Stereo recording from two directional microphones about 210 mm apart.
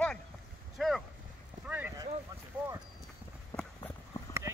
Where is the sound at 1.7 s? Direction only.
10° right (ahead or behind).